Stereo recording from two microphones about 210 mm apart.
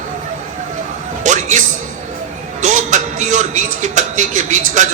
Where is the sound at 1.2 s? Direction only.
35° right (ahead or behind).